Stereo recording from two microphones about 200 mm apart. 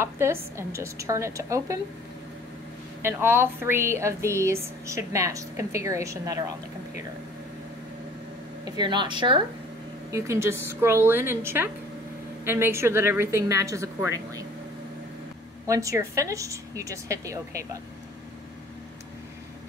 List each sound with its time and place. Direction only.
0.0 s a woman's voice: 15° right (ahead or behind)
3.0 s a woman's voice: 10° right (ahead or behind)
8.6 s a woman's voice: 20° right (ahead or behind)
15.6 s a woman's voice: 15° right (ahead or behind)